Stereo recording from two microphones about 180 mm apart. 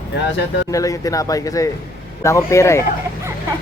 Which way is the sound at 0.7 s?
20° left (ahead or behind).